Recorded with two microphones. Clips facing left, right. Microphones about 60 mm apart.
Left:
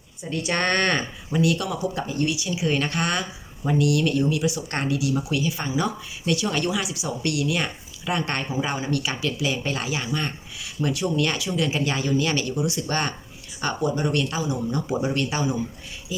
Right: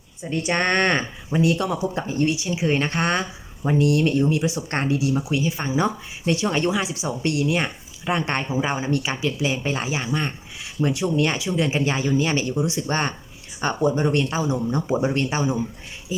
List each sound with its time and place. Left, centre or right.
0.2 s speech: right